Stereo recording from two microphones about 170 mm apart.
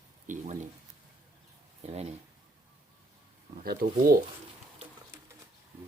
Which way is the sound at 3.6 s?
60° right (ahead or behind).